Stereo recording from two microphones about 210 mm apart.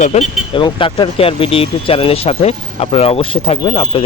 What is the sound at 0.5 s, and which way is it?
Speech, 25° left (ahead or behind).